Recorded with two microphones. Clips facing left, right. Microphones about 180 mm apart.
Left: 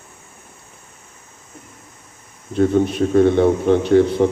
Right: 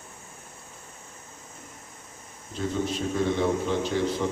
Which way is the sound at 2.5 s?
60° left (ahead or behind).